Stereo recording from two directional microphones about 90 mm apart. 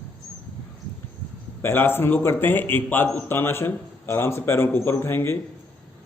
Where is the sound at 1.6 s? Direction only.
25° left (ahead or behind).